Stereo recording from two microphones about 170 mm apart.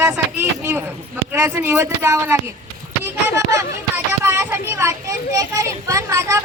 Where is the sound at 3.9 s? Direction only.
15° right (ahead or behind).